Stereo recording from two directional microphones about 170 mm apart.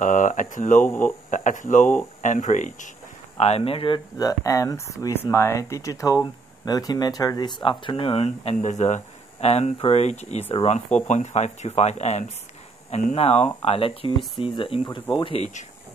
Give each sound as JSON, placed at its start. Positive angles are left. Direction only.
{"t": 0.0, "sound": "a sound", "side_deg": 50}
{"t": 0.8, "sound": "speech", "side_deg": 10}
{"t": 1.3, "sound": "speech", "side_deg": 50}